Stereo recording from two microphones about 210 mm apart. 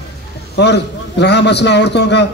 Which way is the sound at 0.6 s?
55° left (ahead or behind).